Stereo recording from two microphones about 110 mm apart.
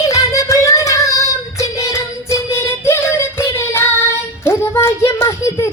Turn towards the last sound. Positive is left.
turn(degrees=25)  # may be behind; listen again after turning